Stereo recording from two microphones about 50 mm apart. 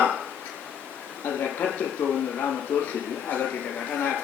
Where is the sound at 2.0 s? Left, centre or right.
Left.